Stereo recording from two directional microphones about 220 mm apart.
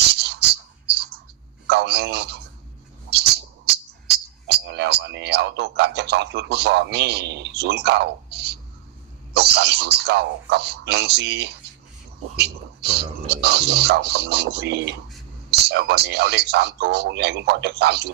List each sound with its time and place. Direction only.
0.0 s a sound: 50° right (ahead or behind)
1.6 s telephone: 50° right (ahead or behind)
3.7 s music: 50° right (ahead or behind)
9.3 s a man's voice: 50° right (ahead or behind)